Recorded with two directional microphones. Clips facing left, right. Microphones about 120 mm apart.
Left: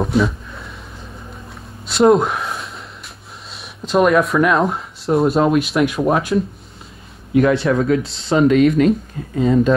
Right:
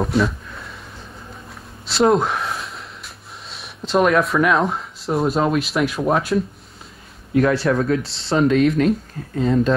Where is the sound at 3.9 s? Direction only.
Centre (ahead or behind).